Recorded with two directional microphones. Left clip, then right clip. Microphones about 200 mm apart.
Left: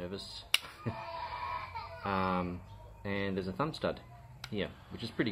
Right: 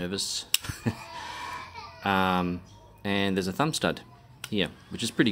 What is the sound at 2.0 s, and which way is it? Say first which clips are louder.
Speech: right 8 dB; 40° right (ahead or behind).